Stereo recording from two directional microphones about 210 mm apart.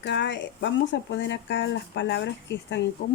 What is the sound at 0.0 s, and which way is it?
Speech, 55° left (ahead or behind).